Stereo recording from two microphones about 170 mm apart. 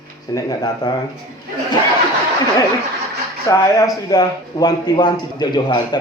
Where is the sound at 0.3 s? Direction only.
25° left (ahead or behind).